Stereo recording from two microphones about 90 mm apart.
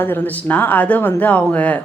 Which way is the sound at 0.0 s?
20° left (ahead or behind).